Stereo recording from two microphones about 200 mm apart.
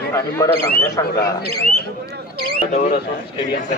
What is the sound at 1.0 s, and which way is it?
Speech, 15° left (ahead or behind).